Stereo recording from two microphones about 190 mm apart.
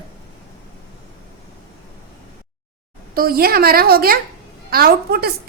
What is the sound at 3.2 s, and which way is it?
A woman's voice, 50° right (ahead or behind).